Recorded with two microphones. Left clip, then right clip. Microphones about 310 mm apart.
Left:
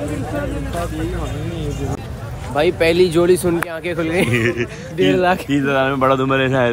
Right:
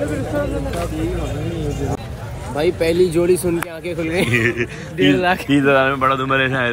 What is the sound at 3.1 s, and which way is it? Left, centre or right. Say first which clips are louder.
A man's voice: left 2 dB; centre.